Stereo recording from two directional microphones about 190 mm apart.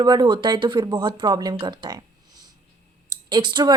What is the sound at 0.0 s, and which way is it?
Speech, 20° right (ahead or behind).